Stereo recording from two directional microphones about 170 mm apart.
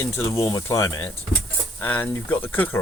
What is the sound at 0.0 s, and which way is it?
Speech, 15° left (ahead or behind).